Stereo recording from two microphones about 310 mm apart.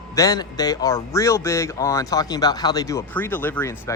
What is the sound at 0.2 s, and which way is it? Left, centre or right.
Speech, centre.